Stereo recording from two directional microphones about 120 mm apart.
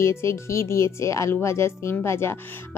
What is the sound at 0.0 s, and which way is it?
A woman's voice, 25° left (ahead or behind).